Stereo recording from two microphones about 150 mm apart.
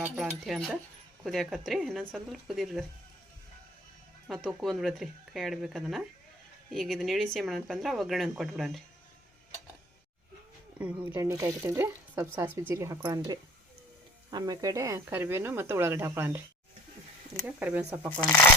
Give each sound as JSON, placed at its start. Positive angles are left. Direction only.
{"t": 0.0, "sound": "speech", "side_deg": -5}
{"t": 4.3, "sound": "speech", "side_deg": 0}
{"t": 11.0, "sound": "speech", "side_deg": -20}
{"t": 17.4, "sound": "speech", "side_deg": -10}
{"t": 18.2, "sound": "speech", "side_deg": 10}